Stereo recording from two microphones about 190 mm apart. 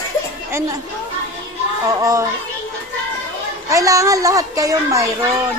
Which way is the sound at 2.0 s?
20° right (ahead or behind).